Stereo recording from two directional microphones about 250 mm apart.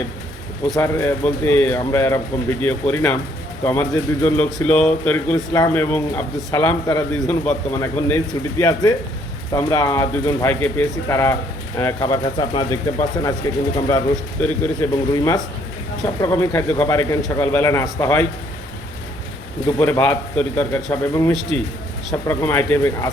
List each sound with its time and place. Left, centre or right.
0.7 s speech: centre
13.7 s speech: centre
19.8 s speech: centre